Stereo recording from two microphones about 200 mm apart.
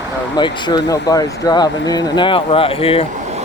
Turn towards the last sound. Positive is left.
turn(degrees=30)  # may be behind; listen again after turning